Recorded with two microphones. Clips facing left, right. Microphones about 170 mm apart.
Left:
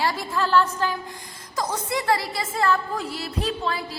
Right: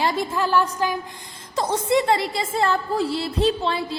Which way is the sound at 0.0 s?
20° right (ahead or behind).